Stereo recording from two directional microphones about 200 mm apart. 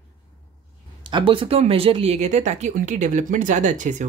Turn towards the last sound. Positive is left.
turn(degrees=-35)  # may be behind; listen again after turning